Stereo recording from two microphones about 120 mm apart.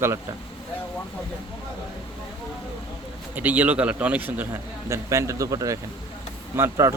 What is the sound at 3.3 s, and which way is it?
A man's voice, 15° right (ahead or behind).